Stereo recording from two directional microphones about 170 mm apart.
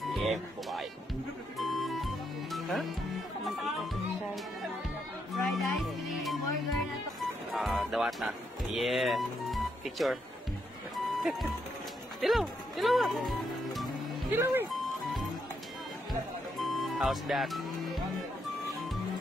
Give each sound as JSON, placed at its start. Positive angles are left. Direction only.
{"t": 0.0, "sound": "music", "side_deg": 0}
{"t": 5.3, "sound": "speech", "side_deg": 0}
{"t": 11.1, "sound": "music", "side_deg": 0}
{"t": 12.2, "sound": "speech", "side_deg": 0}
{"t": 14.3, "sound": "speech", "side_deg": -15}
{"t": 16.1, "sound": "music", "side_deg": 0}